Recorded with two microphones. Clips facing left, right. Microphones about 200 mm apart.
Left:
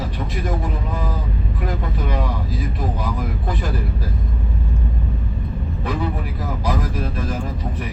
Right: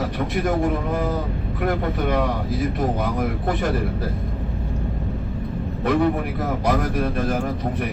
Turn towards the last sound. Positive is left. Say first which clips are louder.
# right 3 dB
turn(degrees=-65)  # may be behind; listen again after turning